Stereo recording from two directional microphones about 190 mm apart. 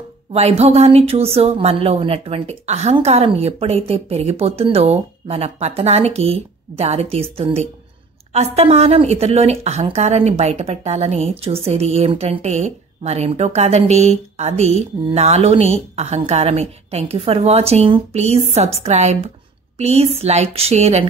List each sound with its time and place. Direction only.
0.3 s speech: 35° right (ahead or behind)